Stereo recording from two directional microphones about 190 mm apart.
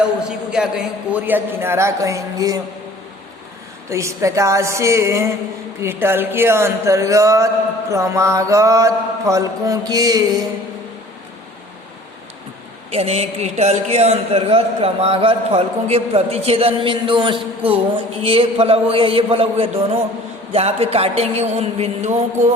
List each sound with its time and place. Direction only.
0.3 s a man's voice: 5° right (ahead or behind)
3.8 s speech: 15° right (ahead or behind)
12.9 s a man's voice: 35° right (ahead or behind)